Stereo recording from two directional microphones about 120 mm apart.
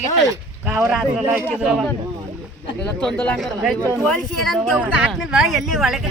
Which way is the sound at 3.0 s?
5° left (ahead or behind).